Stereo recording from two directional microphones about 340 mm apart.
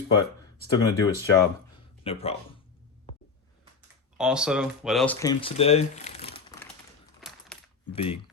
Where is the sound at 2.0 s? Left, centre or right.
Centre.